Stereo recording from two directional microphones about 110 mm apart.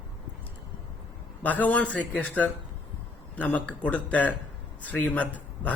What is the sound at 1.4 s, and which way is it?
A man's voice, 15° left (ahead or behind).